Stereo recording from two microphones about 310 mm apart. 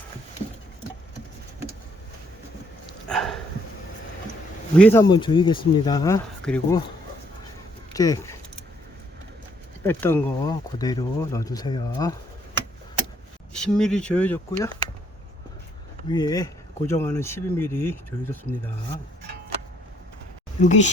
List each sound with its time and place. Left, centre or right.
3.1 s sniff: centre
4.8 s speech: centre
7.9 s speech: centre
9.8 s speech: centre
13.5 s speech: centre
16.0 s speech: centre
20.6 s speech: left